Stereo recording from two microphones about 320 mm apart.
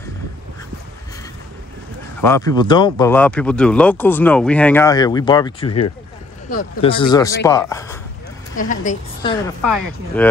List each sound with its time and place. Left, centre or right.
2.2 s speech: centre
8.5 s a woman's voice: left
10.2 s speech: centre